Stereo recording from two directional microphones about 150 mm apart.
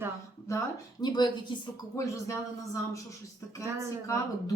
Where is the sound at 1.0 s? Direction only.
30° left (ahead or behind).